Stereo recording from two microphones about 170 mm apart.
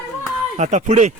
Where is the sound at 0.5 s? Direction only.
45° right (ahead or behind).